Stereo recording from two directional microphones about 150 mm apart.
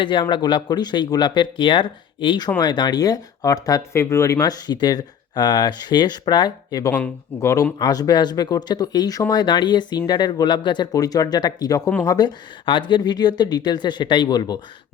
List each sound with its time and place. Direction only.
0.0 s speech: 35° left (ahead or behind)